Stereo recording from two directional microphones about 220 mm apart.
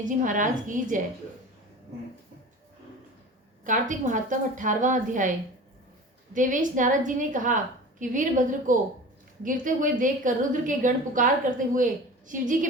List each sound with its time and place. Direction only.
0.0 s a woman's voice: 35° right (ahead or behind)
3.6 s a woman's voice: 35° right (ahead or behind)
6.3 s a woman's voice: 35° right (ahead or behind)